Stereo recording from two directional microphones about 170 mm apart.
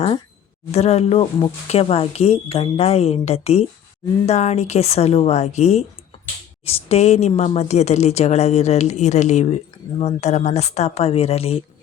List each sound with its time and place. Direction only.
0.7 s speech: 40° left (ahead or behind)